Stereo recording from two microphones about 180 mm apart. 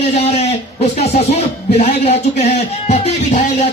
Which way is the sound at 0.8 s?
35° left (ahead or behind).